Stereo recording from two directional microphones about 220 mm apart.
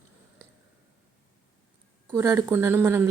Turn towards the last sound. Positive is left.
turn(degrees=-10)  # may be behind; listen again after turning